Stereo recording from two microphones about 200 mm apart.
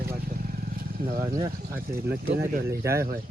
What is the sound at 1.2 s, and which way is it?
Speech, 20° right (ahead or behind).